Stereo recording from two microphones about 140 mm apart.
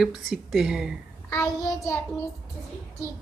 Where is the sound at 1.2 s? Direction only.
20° left (ahead or behind).